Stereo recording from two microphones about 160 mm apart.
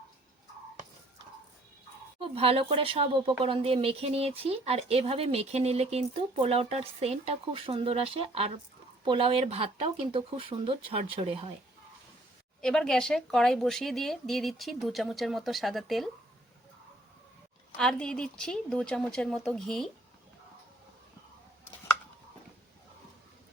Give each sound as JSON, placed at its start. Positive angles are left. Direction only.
{"t": 2.2, "sound": "speech", "side_deg": -40}
{"t": 12.6, "sound": "speech", "side_deg": 5}
{"t": 17.7, "sound": "speech", "side_deg": 5}